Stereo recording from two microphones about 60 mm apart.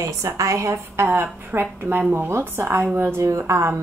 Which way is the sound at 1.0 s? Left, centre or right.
Right.